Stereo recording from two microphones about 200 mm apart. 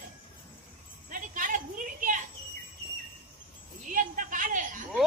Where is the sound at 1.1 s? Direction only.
40° right (ahead or behind).